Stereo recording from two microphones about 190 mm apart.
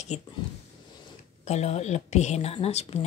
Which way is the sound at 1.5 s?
35° left (ahead or behind).